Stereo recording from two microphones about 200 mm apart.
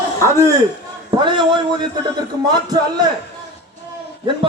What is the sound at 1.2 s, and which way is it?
Speech, 25° right (ahead or behind).